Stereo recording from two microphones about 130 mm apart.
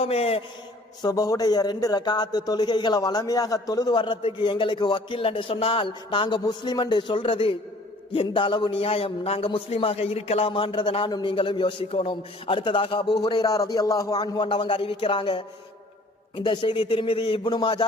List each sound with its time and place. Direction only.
0.0 s a man's voice: 50° left (ahead or behind)
1.0 s a man's voice: 30° left (ahead or behind)